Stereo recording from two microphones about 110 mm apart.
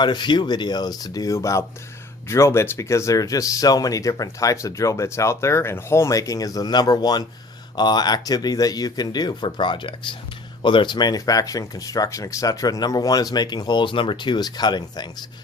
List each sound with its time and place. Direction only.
0.0 s speech: 45° left (ahead or behind)